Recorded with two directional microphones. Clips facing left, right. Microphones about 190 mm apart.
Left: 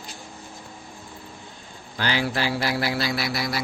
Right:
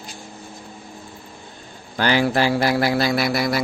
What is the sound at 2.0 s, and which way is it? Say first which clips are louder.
Speech: right 7 dB; 50° right (ahead or behind).